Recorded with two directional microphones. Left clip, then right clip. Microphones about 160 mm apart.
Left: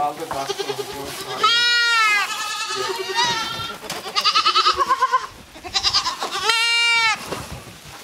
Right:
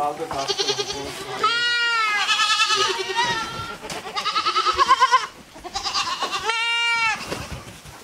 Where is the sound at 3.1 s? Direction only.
20° left (ahead or behind).